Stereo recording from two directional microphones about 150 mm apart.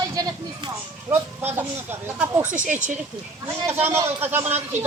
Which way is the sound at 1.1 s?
15° right (ahead or behind).